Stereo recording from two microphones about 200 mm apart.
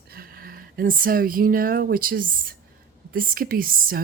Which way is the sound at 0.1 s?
50° right (ahead or behind).